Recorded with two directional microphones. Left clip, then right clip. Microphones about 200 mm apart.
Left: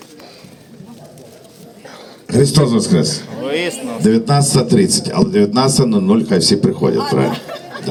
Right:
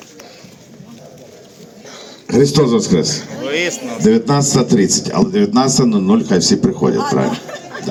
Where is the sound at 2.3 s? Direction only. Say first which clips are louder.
Right 2 dB; 15° left (ahead or behind).